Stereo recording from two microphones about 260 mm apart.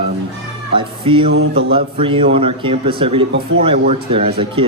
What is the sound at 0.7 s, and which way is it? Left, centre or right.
A man's voice, centre.